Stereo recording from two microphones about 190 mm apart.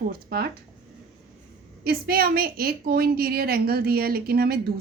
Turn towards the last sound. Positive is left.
turn(degrees=-55)  # may be behind; listen again after turning